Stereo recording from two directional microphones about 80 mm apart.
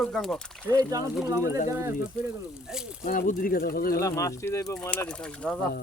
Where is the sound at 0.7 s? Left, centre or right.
Right.